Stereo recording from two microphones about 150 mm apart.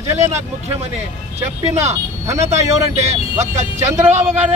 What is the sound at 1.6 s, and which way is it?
Speech, 50° right (ahead or behind).